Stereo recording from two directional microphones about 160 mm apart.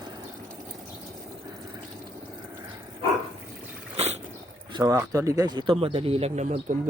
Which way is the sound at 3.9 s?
40° right (ahead or behind).